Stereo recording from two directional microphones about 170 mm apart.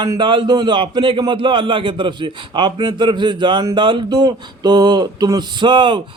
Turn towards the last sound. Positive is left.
turn(degrees=-30)  # may be behind; listen again after turning